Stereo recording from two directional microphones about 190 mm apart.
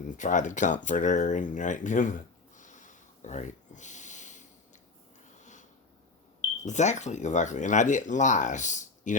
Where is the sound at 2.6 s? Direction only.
40° left (ahead or behind).